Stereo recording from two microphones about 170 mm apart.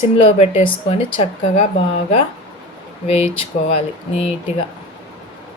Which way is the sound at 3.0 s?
35° left (ahead or behind).